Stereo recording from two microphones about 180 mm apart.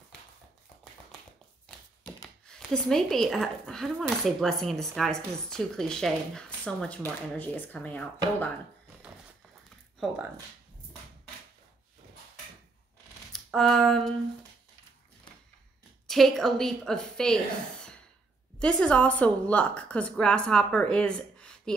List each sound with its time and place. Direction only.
2.4 s speech: 5° left (ahead or behind)
13.3 s a sound: centre (ahead or behind)
16.1 s speech: centre (ahead or behind)
18.6 s speech: 5° left (ahead or behind)